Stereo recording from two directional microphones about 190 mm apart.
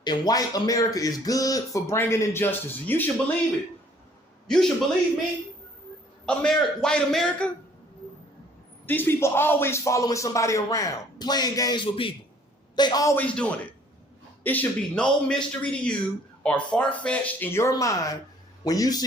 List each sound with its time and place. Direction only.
0.0 s speech: 20° left (ahead or behind)
4.4 s a man's voice: 5° left (ahead or behind)
6.2 s a man's voice: 5° left (ahead or behind)
8.9 s a man's voice: 10° left (ahead or behind)